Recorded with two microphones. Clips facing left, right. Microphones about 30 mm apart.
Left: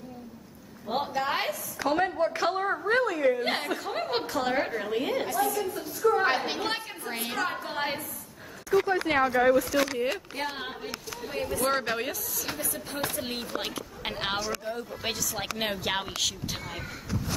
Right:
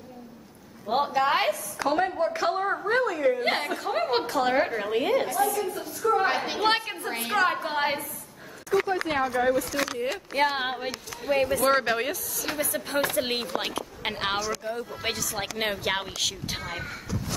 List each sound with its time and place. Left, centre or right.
0.8 s a woman's voice: centre
6.2 s a woman's voice: centre
6.6 s a woman's voice: right
7.1 s a woman's voice: centre
7.3 s a woman's voice: right
8.8 s a woman's voice: centre
10.5 s speech: right
11.7 s a woman's voice: centre
12.5 s chopping: right
13.1 s speech: right
13.5 s a woman's voice: centre
16.4 s speech: right